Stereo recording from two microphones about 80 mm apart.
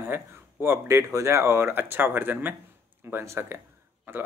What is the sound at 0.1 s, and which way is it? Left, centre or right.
Speech, right.